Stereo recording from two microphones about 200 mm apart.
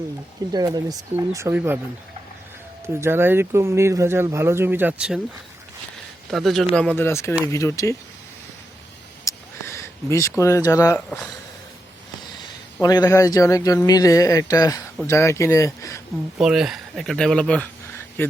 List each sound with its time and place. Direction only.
0.5 s speech: 20° right (ahead or behind)
2.8 s speech: 10° right (ahead or behind)
6.3 s speech: centre (ahead or behind)
9.2 s speech: 15° left (ahead or behind)
12.8 s speech: 20° left (ahead or behind)
16.4 s speech: centre (ahead or behind)